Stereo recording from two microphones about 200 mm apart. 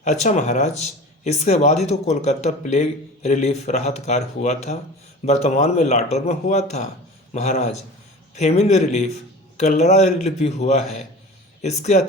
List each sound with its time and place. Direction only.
0.0 s speech: 35° left (ahead or behind)